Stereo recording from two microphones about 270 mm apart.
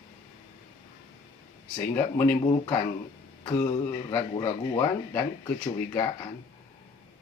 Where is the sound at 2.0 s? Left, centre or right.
Centre.